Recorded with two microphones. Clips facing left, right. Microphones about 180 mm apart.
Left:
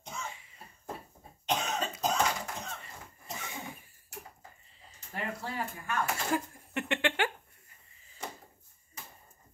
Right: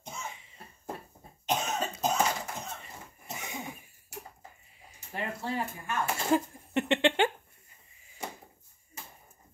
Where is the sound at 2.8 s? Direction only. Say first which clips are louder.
Right 1 dB; 15° right (ahead or behind).